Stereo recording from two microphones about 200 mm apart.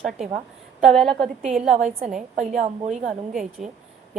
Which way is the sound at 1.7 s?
35° right (ahead or behind).